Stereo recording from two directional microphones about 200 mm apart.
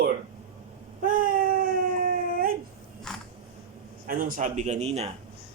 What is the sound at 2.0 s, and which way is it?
Dog, 45° right (ahead or behind).